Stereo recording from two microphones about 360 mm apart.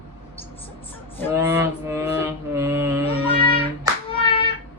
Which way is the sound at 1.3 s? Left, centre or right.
Centre.